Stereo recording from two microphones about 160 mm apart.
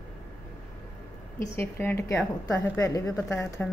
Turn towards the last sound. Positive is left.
turn(degrees=15)  # may be behind; listen again after turning